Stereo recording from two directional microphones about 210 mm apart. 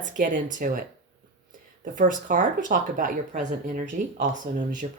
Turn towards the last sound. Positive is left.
turn(degrees=-30)  # may be behind; listen again after turning